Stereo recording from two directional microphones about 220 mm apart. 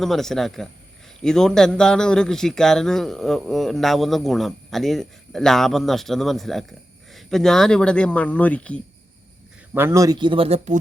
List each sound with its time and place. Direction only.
0.0 s a man's voice: centre (ahead or behind)
9.7 s speech: 10° right (ahead or behind)